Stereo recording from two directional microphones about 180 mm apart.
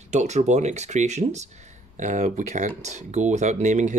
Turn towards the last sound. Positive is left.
turn(degrees=-40)  # may be behind; listen again after turning